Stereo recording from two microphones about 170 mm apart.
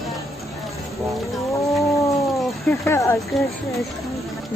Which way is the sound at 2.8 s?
15° left (ahead or behind).